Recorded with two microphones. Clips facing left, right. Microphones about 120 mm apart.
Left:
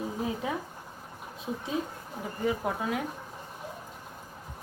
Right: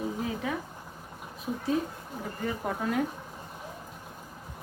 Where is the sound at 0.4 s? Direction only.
25° left (ahead or behind).